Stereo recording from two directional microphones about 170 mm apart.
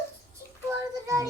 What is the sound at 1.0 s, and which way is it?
Music, 20° right (ahead or behind).